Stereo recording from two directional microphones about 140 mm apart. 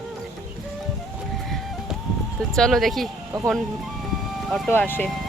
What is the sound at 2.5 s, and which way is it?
Speech, centre (ahead or behind).